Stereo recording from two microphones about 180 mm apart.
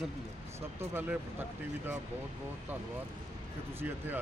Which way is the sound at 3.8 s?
10° right (ahead or behind).